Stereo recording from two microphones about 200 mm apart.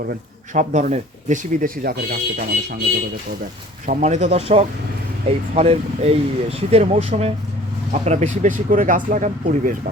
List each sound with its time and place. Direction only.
0.1 s speech: 40° right (ahead or behind)
3.8 s speech: 35° right (ahead or behind)